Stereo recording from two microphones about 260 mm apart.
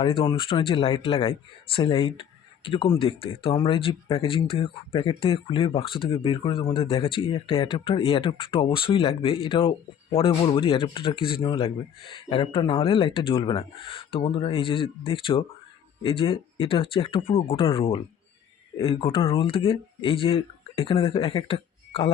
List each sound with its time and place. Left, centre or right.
0.0 s speech: centre